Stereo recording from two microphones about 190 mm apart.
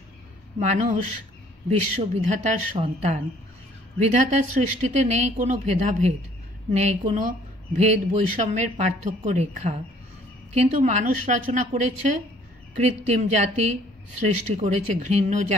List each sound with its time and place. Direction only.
0.6 s speech: 35° right (ahead or behind)
2.2 s speech: 35° right (ahead or behind)